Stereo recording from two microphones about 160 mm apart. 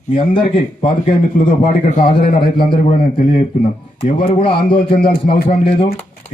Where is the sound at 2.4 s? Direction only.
30° left (ahead or behind).